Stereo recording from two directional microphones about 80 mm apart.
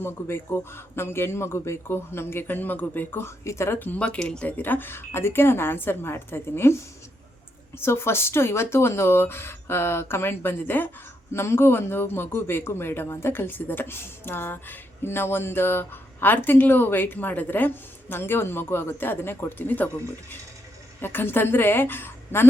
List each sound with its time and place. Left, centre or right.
0.0 s speech: left; by 4.5 s centre
4.5 s speech: left
7.8 s speech: left
21.0 s speech: left